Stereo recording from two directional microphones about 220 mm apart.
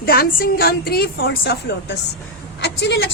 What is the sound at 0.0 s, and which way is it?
A woman's voice, 45° left (ahead or behind).